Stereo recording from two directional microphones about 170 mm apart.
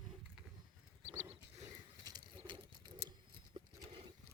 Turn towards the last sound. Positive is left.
turn(degrees=-30)  # may be behind; listen again after turning